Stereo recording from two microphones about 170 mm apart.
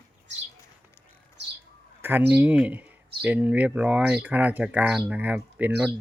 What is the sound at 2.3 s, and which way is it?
Speech, 10° right (ahead or behind).